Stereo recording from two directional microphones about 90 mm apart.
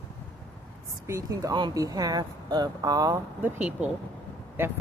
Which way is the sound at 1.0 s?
35° right (ahead or behind).